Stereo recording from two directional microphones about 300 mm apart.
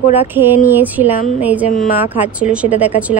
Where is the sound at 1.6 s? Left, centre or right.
Left.